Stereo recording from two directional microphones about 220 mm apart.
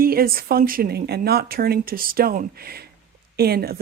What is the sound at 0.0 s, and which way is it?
Speech, 45° right (ahead or behind).